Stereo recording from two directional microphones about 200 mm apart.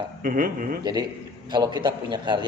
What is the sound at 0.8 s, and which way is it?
A man's voice, 20° right (ahead or behind).